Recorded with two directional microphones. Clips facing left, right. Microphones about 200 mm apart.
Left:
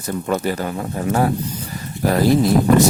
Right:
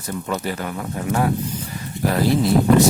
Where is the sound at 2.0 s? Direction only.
40° left (ahead or behind).